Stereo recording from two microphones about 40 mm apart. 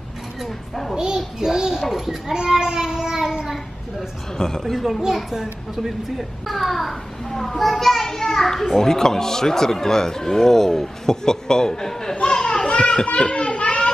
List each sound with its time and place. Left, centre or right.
0.9 s a child's voice: centre
2.3 s a sound: centre
4.4 s a child's voice: centre
5.3 s a child's voice: centre
12.2 s children playing: centre